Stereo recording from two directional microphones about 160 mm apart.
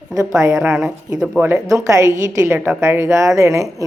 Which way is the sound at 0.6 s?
5° right (ahead or behind).